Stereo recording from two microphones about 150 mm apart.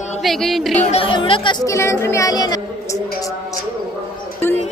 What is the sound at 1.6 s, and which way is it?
Speech, 20° left (ahead or behind).